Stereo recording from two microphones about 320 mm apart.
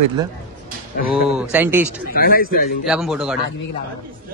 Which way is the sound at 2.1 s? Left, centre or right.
Left.